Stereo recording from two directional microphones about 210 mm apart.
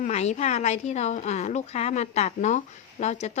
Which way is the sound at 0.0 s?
35° left (ahead or behind).